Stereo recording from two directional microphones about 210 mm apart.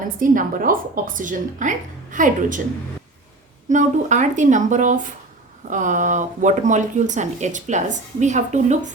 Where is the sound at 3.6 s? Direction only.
35° right (ahead or behind).